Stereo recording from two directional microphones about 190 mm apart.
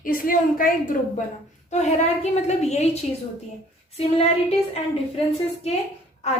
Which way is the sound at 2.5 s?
35° left (ahead or behind).